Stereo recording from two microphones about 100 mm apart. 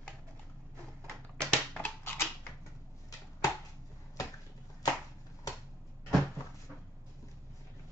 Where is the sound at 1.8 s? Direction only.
20° left (ahead or behind).